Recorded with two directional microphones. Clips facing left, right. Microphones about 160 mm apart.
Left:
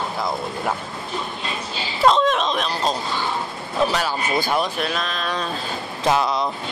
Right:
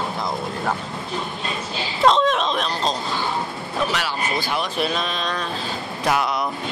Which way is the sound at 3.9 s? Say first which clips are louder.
Left 2 dB; 40° left (ahead or behind).